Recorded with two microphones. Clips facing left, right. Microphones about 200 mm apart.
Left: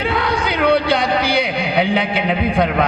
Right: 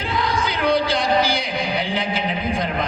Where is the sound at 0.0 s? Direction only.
60° left (ahead or behind).